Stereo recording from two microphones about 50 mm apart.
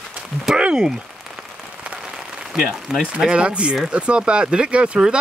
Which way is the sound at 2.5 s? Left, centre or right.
Centre.